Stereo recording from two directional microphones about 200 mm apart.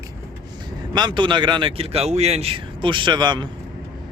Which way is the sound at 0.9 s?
20° right (ahead or behind).